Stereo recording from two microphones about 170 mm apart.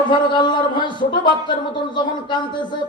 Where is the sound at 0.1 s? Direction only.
25° left (ahead or behind).